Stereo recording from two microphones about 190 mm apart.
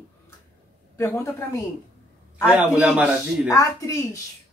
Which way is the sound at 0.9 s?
15° left (ahead or behind).